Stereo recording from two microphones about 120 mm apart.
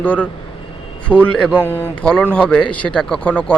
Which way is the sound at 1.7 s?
20° left (ahead or behind).